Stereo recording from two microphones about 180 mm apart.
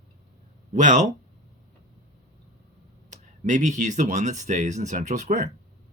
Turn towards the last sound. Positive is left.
turn(degrees=-45)  # may be behind; listen again after turning